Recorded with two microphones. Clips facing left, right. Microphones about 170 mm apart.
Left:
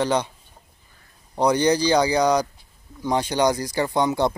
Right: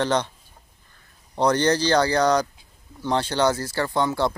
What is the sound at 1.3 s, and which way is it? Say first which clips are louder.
Speech: left 1 dB; 10° left (ahead or behind).